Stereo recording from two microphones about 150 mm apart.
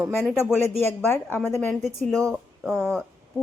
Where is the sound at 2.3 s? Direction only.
5° right (ahead or behind).